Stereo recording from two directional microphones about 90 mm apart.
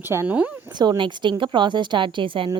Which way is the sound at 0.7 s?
55° right (ahead or behind).